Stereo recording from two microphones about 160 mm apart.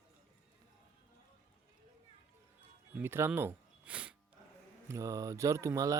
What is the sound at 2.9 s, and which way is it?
Speech, 15° right (ahead or behind).